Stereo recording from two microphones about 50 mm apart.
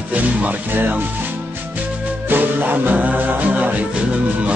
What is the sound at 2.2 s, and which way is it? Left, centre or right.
Music, right.